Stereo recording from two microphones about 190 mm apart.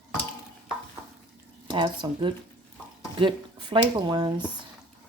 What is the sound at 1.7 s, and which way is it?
Speech, 25° right (ahead or behind).